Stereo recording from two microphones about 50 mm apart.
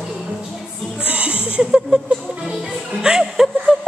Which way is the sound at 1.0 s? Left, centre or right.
Right.